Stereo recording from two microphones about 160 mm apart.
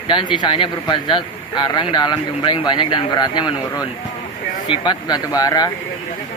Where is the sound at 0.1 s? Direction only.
30° left (ahead or behind).